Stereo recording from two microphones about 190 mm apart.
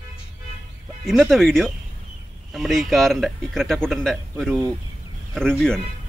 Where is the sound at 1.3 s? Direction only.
Centre (ahead or behind).